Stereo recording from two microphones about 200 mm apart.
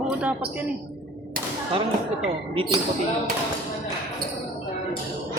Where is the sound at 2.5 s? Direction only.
25° right (ahead or behind).